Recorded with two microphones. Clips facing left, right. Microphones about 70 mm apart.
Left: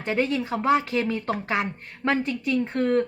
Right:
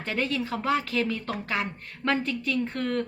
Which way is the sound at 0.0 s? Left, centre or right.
Left.